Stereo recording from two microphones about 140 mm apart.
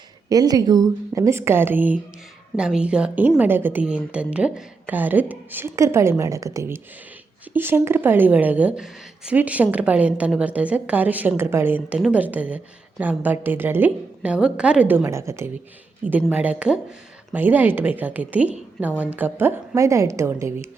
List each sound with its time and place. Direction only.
0.3 s a woman's voice: 25° right (ahead or behind)